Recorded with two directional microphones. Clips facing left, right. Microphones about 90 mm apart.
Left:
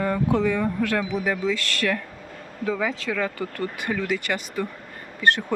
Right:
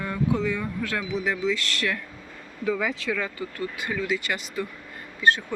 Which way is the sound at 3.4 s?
55° left (ahead or behind).